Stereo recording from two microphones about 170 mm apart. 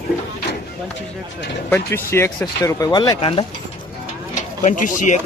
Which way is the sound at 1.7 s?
15° left (ahead or behind).